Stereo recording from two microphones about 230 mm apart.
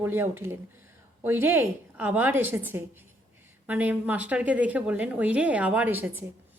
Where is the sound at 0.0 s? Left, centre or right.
Centre.